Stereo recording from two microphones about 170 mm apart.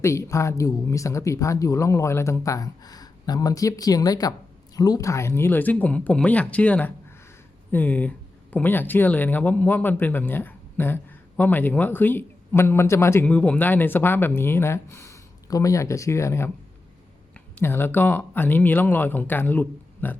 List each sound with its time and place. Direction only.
0.0 s speech: 15° left (ahead or behind)